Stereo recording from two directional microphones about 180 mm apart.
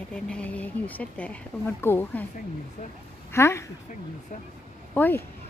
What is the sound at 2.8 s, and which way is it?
Speech, 40° left (ahead or behind).